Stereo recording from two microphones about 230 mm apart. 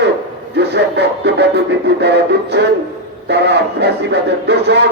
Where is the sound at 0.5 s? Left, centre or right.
Right.